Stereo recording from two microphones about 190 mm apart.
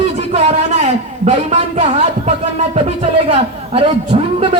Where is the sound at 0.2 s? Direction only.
35° right (ahead or behind).